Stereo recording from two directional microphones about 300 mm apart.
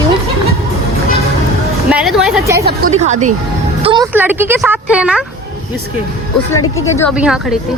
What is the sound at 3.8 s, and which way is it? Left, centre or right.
Music, centre.